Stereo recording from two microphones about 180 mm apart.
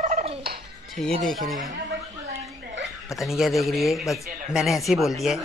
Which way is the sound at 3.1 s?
Centre (ahead or behind).